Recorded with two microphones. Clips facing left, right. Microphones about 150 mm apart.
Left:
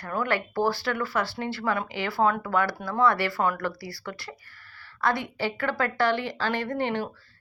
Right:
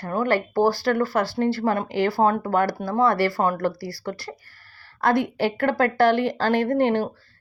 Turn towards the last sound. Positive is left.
turn(degrees=-45)  # may be behind; listen again after turning